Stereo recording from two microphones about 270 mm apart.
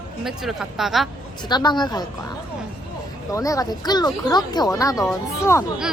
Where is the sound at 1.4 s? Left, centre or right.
Centre.